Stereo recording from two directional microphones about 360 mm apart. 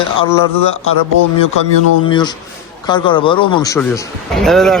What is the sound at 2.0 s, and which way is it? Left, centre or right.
A man's voice, centre.